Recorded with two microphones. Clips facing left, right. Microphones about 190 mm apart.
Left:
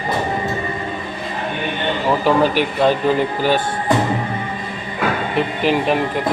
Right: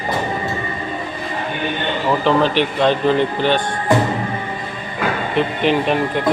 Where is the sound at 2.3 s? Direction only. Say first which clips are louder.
Even; 10° left (ahead or behind).